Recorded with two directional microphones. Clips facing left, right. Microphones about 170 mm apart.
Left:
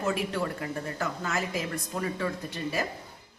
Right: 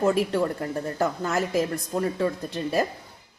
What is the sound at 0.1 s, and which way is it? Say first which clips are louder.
Speech: right 7 dB; 40° right (ahead or behind).